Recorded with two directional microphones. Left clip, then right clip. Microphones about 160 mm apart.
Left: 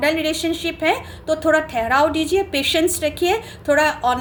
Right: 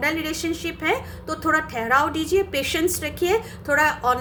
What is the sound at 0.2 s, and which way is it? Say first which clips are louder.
A woman's voice: left 5 dB; 35° left (ahead or behind).